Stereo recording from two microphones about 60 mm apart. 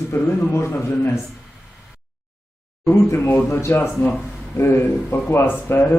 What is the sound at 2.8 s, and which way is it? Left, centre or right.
Speech, left.